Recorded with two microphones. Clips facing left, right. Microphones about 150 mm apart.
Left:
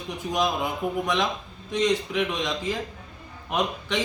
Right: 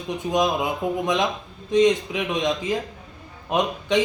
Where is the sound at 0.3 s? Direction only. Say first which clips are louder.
Right 4 dB; 20° right (ahead or behind).